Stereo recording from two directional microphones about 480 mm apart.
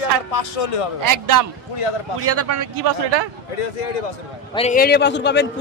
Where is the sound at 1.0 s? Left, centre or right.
Right.